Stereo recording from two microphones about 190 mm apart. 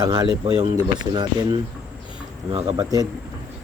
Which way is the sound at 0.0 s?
20° right (ahead or behind).